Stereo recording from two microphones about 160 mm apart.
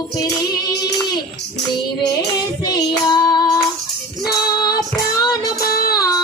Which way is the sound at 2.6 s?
25° left (ahead or behind).